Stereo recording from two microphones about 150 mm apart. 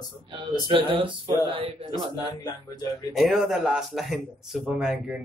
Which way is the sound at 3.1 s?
Centre (ahead or behind).